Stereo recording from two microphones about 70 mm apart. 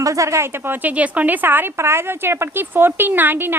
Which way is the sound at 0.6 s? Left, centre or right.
Right.